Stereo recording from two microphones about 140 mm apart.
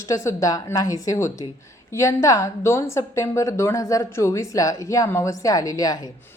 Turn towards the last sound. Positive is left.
turn(degrees=25)  # may be behind; listen again after turning